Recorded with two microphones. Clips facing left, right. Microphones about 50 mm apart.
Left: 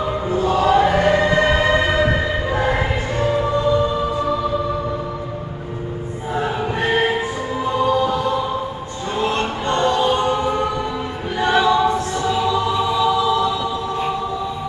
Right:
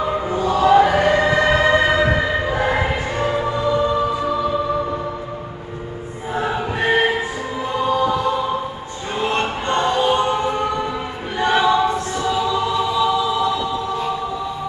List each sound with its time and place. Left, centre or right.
0.0 s chant: centre
0.7 s choir: centre
2.0 s music: centre
6.8 s music: centre
7.8 s choir: centre
9.2 s music: centre
11.3 s choir: centre
12.7 s choir: centre
13.0 s choir: centre